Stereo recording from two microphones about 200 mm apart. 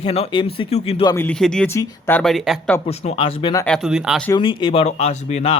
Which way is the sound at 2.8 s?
30° left (ahead or behind).